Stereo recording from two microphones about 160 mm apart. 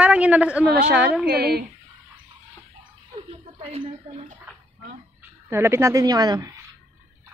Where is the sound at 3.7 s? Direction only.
45° right (ahead or behind).